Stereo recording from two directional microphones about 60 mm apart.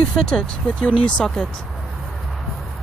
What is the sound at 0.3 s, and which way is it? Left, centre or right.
Speech, centre.